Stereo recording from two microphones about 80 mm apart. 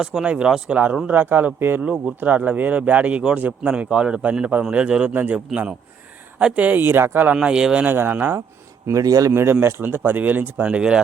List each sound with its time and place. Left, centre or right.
0.0 s speech: centre; by 1.9 s right
1.9 s speech: centre
6.4 s speech: centre
7.3 s speech: centre
7.9 s speech: right
8.9 s a man's voice: right
9.3 s speech: right; by 11.0 s centre